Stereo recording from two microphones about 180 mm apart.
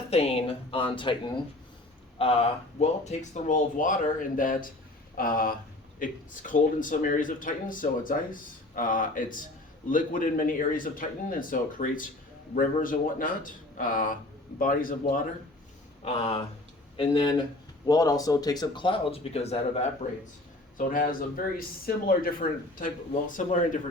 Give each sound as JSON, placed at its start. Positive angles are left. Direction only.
{"t": 0.1, "sound": "speech", "side_deg": 35}
{"t": 16.0, "sound": "speech", "side_deg": 35}